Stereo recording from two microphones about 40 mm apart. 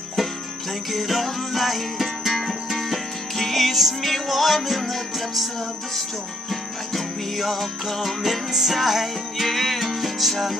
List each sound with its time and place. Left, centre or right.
0.9 s music: centre
6.5 s music: centre